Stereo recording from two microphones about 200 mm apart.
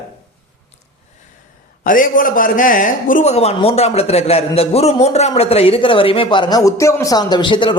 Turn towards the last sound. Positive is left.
turn(degrees=25)  # may be behind; listen again after turning